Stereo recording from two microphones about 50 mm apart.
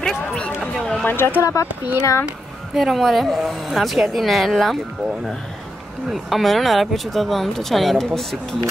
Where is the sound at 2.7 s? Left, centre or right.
Centre.